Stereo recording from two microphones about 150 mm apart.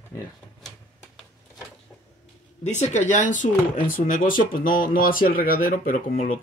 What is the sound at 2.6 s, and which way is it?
Speech, 50° left (ahead or behind).